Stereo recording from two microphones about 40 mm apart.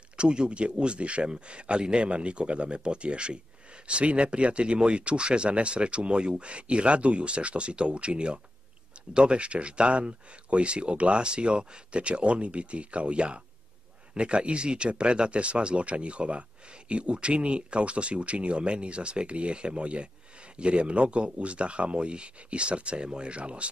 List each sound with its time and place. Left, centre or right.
0.2 s speech: right